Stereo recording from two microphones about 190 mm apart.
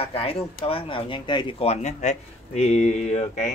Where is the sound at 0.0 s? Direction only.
30° left (ahead or behind).